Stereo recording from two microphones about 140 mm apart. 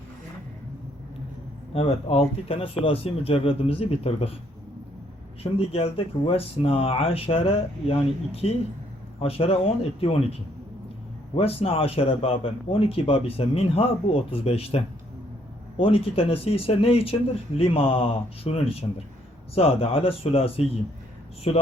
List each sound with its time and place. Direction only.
1.7 s a man's voice: 45° left (ahead or behind)
5.4 s a man's voice: 45° left (ahead or behind)
11.3 s a man's voice: 45° left (ahead or behind)
15.8 s a man's voice: 45° left (ahead or behind)